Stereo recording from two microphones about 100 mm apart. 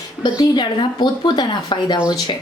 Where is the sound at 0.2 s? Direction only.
45° left (ahead or behind).